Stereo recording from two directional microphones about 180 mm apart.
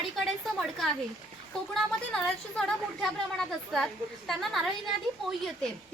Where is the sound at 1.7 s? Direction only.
Centre (ahead or behind).